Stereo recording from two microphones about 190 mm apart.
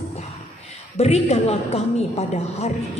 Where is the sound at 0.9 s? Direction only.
35° left (ahead or behind).